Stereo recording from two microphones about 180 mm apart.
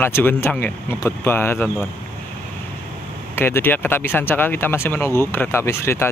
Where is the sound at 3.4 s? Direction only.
10° left (ahead or behind).